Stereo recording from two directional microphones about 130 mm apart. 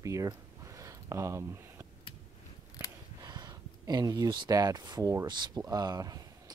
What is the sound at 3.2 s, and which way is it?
Speech, 30° right (ahead or behind).